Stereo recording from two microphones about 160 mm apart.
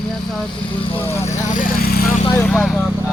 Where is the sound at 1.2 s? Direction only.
50° left (ahead or behind).